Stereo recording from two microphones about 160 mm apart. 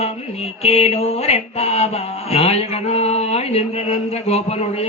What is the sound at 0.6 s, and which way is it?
Mantra, 40° left (ahead or behind).